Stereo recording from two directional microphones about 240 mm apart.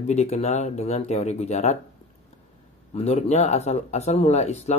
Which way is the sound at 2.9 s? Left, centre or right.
Left.